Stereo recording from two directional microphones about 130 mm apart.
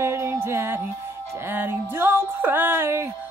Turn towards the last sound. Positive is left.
turn(degrees=-20)  # may be behind; listen again after turning